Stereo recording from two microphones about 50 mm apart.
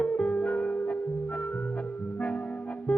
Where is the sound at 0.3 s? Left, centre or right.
Left.